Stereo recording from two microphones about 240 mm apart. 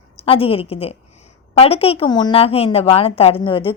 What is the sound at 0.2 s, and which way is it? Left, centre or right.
A woman's voice, left.